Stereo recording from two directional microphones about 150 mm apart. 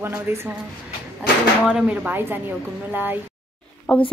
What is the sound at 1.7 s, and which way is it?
Speech, 5° right (ahead or behind).